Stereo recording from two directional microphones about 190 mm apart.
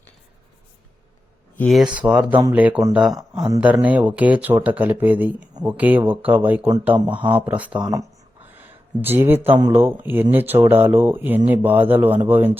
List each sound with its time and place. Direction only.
1.5 s speech: centre (ahead or behind)
3.2 s speech: 20° right (ahead or behind)
3.6 s speech: 10° right (ahead or behind)
7.8 s speech: 20° right (ahead or behind)
8.5 s a sound: 10° right (ahead or behind)
9.6 s speech: 15° right (ahead or behind)